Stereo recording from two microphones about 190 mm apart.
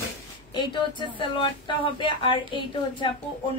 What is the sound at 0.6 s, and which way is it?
Speech, 25° left (ahead or behind).